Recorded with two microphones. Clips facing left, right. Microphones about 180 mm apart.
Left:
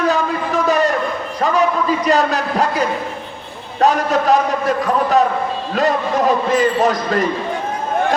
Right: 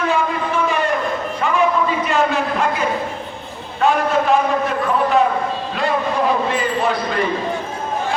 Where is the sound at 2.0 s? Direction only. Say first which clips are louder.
Left 2 dB; 40° left (ahead or behind).